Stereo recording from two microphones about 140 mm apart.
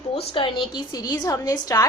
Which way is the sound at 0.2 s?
35° left (ahead or behind).